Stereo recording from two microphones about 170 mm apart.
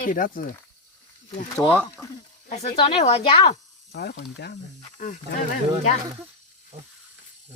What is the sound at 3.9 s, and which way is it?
Speech, 75° left (ahead or behind).